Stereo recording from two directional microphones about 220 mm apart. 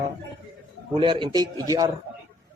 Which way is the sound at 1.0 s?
20° right (ahead or behind).